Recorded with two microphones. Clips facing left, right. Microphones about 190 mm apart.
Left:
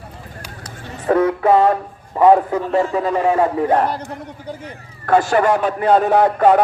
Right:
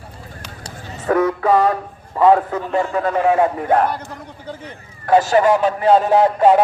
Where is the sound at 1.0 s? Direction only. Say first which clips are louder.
Left 2 dB; 30° left (ahead or behind).